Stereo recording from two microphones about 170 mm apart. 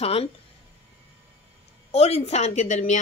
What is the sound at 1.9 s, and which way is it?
A woman's voice, 40° left (ahead or behind).